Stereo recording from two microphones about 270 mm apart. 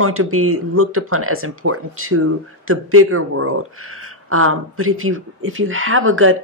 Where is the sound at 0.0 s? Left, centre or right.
Right.